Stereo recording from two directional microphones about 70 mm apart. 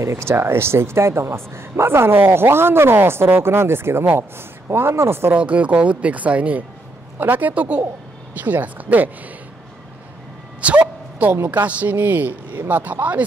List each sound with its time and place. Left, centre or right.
0.0 s speech: right
5.3 s speech: centre
10.6 s a sound: right
11.5 s speech: right